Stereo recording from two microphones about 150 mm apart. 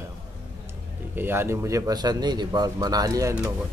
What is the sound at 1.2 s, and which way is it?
Speech, 15° right (ahead or behind).